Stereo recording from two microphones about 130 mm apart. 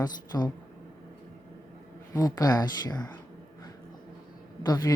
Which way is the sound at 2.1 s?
25° left (ahead or behind).